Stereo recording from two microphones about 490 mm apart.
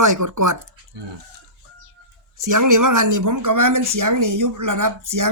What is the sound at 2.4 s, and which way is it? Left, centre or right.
Speech, right.